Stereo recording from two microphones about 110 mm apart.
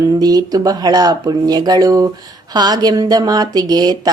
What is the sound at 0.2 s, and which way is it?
A woman's voice, 35° right (ahead or behind).